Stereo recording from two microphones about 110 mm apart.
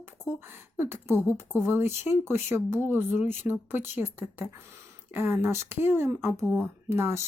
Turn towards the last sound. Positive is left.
turn(degrees=-25)  # may be behind; listen again after turning